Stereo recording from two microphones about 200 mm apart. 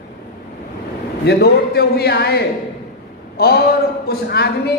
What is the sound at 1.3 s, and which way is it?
A man's voice, 55° left (ahead or behind).